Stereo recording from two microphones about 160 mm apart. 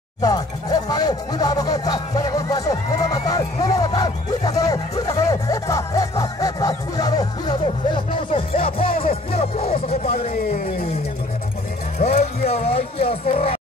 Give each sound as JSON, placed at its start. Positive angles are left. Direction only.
{"t": 0.2, "sound": "speech", "side_deg": 25}
{"t": 12.0, "sound": "speech", "side_deg": 65}
{"t": 12.4, "sound": "speech", "side_deg": 40}